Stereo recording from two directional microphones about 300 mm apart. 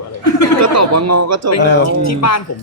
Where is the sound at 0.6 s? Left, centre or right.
Right.